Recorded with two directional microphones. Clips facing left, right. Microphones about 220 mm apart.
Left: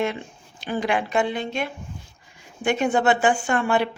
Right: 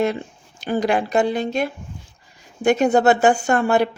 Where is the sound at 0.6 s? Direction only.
40° right (ahead or behind).